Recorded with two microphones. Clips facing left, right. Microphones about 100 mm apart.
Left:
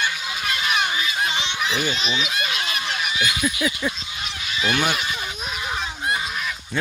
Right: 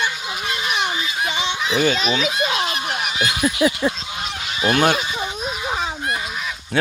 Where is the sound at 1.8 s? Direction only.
45° right (ahead or behind).